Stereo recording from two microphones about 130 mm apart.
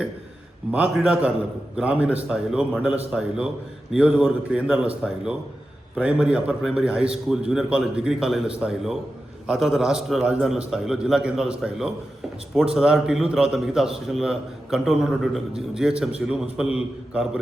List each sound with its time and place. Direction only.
0.9 s a man's voice: 5° right (ahead or behind)